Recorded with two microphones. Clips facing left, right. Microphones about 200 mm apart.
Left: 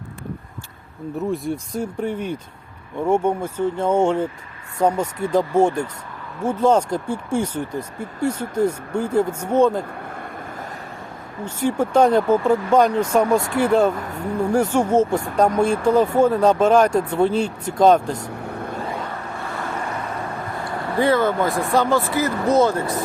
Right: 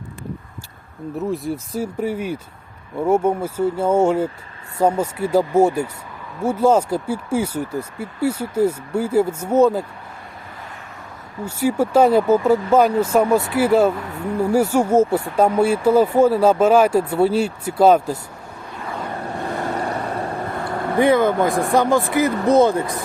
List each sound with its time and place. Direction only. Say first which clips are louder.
1.2 s speech: even; centre (ahead or behind)
11.4 s speech: right 2 dB; 10° right (ahead or behind)
18.4 s vehicle: left 7 dB; 60° left (ahead or behind)
19.6 s boat: right 2 dB; 35° right (ahead or behind)
20.7 s speech: right 3 dB; 15° right (ahead or behind)